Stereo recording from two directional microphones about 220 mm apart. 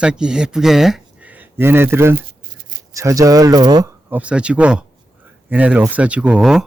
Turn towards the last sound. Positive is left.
turn(degrees=-5)  # may be behind; listen again after turning